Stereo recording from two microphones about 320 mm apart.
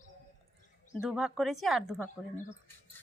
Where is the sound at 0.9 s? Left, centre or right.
Centre.